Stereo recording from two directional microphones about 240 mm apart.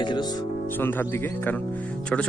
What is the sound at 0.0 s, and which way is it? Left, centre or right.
Music, centre.